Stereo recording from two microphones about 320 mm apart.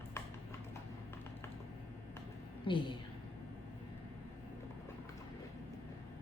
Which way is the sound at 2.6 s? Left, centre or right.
Centre.